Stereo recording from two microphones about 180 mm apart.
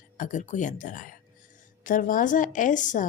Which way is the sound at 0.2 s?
45° left (ahead or behind).